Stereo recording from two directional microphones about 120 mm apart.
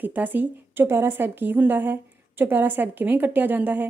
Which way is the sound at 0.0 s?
15° right (ahead or behind).